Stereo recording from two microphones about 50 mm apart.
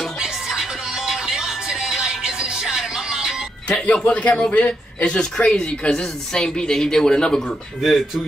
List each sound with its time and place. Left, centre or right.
0.2 s music: centre
3.7 s speech: left
7.8 s speech: centre